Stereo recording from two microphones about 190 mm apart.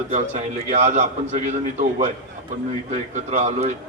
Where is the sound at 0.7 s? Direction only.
40° right (ahead or behind).